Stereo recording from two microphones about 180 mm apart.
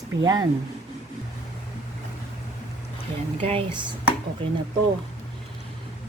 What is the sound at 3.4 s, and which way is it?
Speech, 30° right (ahead or behind).